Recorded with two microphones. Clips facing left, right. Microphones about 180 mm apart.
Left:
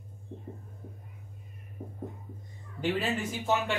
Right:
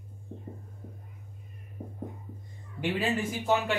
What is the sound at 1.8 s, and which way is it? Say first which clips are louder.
Music: right 1 dB; 15° right (ahead or behind).